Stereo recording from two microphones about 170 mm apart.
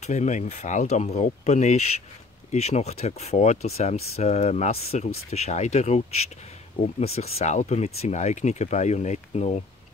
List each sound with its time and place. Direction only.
0.0 s speech: 45° left (ahead or behind)